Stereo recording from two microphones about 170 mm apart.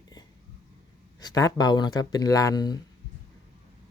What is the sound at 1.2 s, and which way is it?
Speech, 25° left (ahead or behind).